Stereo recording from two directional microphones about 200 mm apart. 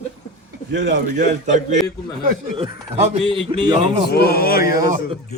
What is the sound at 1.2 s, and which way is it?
A man's voice, 35° right (ahead or behind).